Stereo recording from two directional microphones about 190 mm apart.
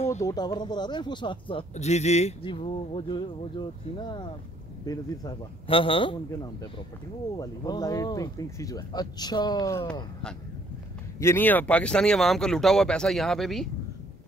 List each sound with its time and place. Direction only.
0.2 s speech: 20° left (ahead or behind)
11.1 s speech: 10° left (ahead or behind)